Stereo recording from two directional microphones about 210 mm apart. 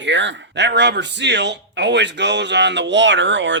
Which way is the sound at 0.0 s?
60° right (ahead or behind).